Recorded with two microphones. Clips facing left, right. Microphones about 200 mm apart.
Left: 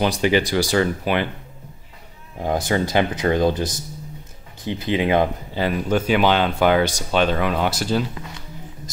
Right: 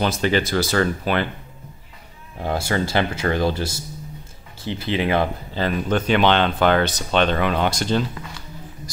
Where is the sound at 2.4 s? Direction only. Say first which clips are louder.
Left 2 dB; 20° left (ahead or behind).